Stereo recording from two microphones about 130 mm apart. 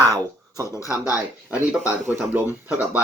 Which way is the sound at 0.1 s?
25° right (ahead or behind).